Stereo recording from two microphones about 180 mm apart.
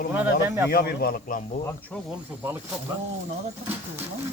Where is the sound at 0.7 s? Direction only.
60° left (ahead or behind).